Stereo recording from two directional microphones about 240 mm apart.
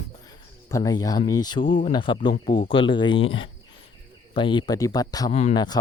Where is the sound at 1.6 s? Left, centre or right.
Left.